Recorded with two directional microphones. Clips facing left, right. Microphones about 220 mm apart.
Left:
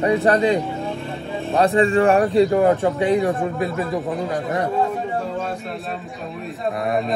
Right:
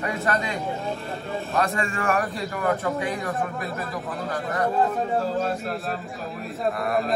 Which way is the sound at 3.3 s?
Centre (ahead or behind).